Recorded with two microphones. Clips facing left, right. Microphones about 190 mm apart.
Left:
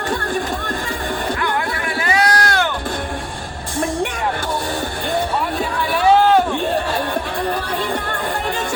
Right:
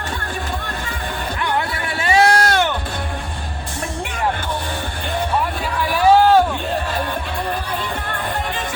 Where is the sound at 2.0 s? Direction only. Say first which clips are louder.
Right 4 dB; 25° right (ahead or behind).